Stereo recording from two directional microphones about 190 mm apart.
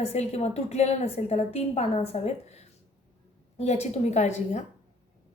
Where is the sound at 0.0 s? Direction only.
35° left (ahead or behind).